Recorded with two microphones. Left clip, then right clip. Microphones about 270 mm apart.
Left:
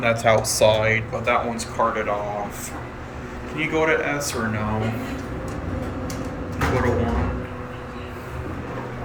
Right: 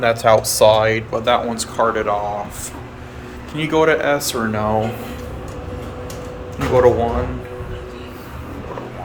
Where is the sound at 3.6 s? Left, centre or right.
Centre.